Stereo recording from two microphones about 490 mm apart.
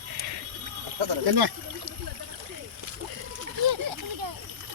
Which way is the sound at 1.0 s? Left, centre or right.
Right.